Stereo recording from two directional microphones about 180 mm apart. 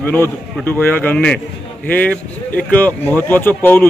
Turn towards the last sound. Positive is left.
turn(degrees=10)  # may be behind; listen again after turning